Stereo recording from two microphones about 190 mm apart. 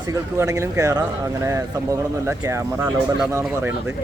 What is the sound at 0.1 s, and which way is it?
Speech, 15° right (ahead or behind).